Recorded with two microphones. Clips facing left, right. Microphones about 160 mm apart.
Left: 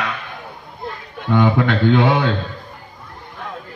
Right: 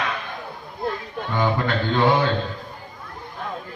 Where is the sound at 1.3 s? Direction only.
75° left (ahead or behind).